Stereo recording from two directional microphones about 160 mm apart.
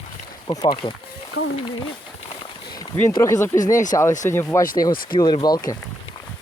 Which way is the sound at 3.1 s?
20° left (ahead or behind).